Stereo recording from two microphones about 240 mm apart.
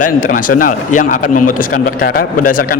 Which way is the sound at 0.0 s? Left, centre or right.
Left.